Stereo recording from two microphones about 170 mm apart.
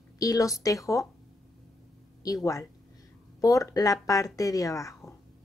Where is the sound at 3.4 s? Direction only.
20° left (ahead or behind).